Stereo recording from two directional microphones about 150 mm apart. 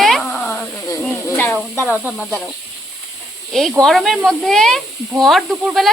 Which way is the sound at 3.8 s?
Centre (ahead or behind).